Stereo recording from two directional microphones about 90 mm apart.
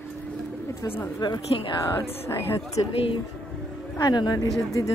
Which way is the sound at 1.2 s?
50° left (ahead or behind).